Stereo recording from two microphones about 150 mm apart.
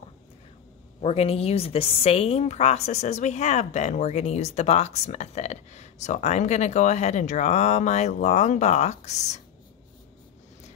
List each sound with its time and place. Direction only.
1.0 s a woman's voice: 40° left (ahead or behind)